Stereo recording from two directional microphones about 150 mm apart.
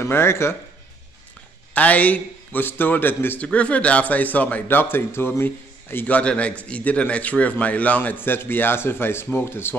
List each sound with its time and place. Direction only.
0.0 s a man's voice: 15° left (ahead or behind)
1.7 s a man's voice: 10° left (ahead or behind)